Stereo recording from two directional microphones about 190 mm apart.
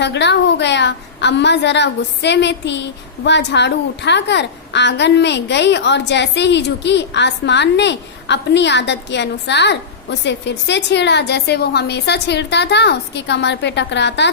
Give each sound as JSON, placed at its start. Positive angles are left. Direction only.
{"t": 0.0, "sound": "a woman's voice", "side_deg": 65}